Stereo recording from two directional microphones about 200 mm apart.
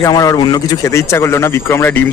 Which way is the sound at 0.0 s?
15° left (ahead or behind).